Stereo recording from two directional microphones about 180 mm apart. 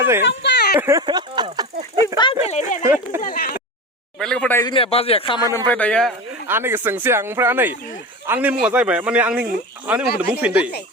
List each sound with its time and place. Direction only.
0.3 s a sound: 70° left (ahead or behind)
0.8 s speech: 20° right (ahead or behind)
2.1 s speech: 25° left (ahead or behind)
2.5 s a man's voice: 40° left (ahead or behind)
2.8 s speech: 15° right (ahead or behind)
3.2 s speech: 50° left (ahead or behind)
4.2 s speech: 5° left (ahead or behind)
4.6 s a man's voice: 30° left (ahead or behind)
5.5 s a man's voice: 10° left (ahead or behind)
6.5 s speech: 10° right (ahead or behind)